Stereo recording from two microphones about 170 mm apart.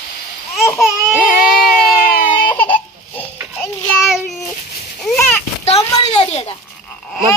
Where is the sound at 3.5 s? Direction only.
10° left (ahead or behind).